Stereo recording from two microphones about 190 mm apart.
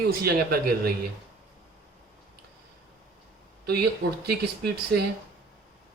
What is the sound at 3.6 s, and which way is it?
Speech, 55° right (ahead or behind).